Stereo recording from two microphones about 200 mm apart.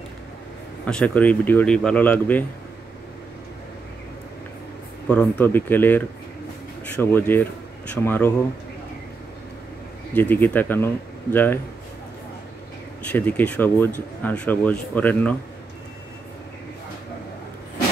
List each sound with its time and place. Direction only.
0.8 s speech: 5° left (ahead or behind)
5.0 s speech: 5° left (ahead or behind)
10.1 s speech: 10° left (ahead or behind)
13.0 s speech: 10° left (ahead or behind)